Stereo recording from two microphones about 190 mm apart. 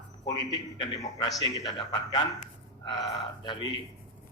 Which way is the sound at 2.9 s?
25° left (ahead or behind).